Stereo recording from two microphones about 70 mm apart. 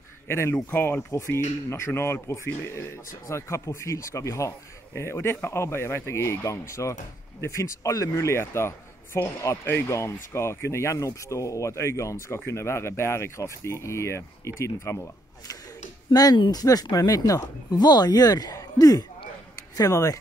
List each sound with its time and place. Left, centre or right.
0.3 s speech: left
0.7 s speech: left
1.1 s speech: left
16.1 s speech: left